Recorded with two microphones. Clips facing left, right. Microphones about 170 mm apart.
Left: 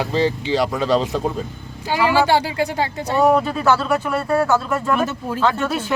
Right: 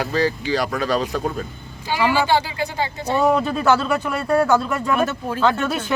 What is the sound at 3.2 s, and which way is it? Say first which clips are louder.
Speech: left 1 dB; 5° left (ahead or behind).